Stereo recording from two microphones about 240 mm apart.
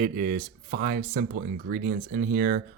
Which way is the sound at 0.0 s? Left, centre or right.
Right.